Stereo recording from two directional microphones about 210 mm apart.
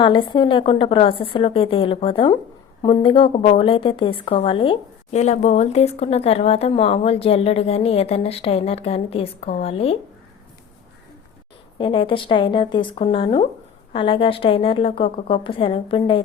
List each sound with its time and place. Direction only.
0.0 s a woman's voice: 20° left (ahead or behind)
11.8 s a woman's voice: 25° left (ahead or behind)